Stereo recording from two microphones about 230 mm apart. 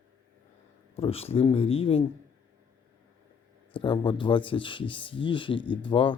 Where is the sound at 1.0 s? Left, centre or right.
Left.